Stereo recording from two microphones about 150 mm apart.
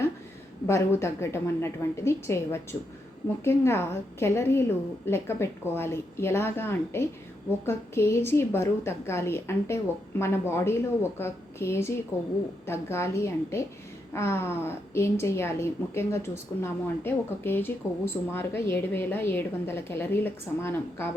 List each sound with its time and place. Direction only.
0.7 s a woman's voice: 20° left (ahead or behind)